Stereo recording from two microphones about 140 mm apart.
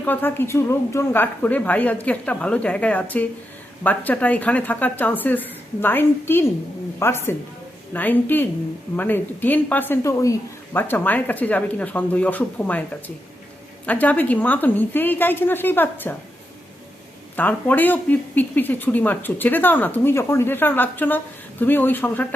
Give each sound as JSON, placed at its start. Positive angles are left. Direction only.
{"t": 0.0, "sound": "speech", "side_deg": 15}
{"t": 17.3, "sound": "speech", "side_deg": 15}